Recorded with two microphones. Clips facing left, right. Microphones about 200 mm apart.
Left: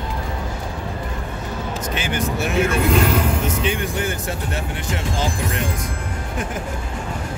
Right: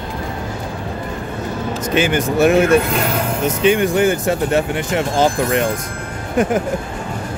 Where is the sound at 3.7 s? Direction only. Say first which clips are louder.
Right 9 dB; 90° right.